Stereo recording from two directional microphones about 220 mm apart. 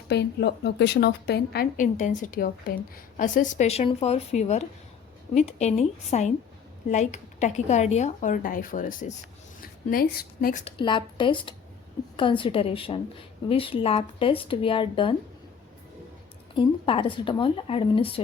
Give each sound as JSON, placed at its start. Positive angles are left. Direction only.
{"t": 0.1, "sound": "a woman's voice", "side_deg": 50}
{"t": 10.7, "sound": "speech", "side_deg": 20}
{"t": 16.6, "sound": "speech", "side_deg": 25}